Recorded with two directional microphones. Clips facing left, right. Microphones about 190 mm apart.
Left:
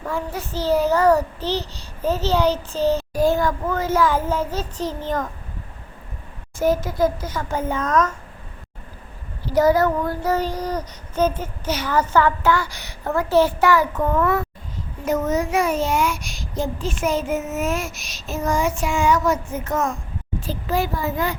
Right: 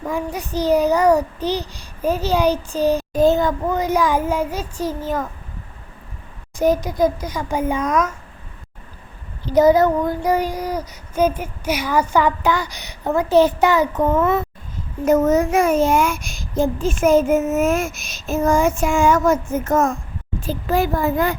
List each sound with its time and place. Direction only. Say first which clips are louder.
0.0 s child singing: right 2 dB; 15° right (ahead or behind)
6.6 s child singing: right 2 dB; 15° right (ahead or behind)
9.5 s child singing: right 3 dB; 20° right (ahead or behind)
15.0 s a child's voice: right 6 dB; 50° right (ahead or behind)